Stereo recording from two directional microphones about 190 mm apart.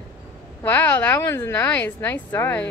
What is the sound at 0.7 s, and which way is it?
A woman's voice, 10° left (ahead or behind).